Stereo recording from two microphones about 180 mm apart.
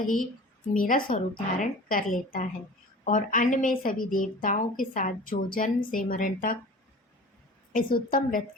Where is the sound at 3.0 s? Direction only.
45° left (ahead or behind).